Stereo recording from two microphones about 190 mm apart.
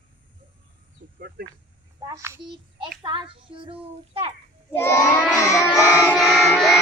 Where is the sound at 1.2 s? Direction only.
55° right (ahead or behind).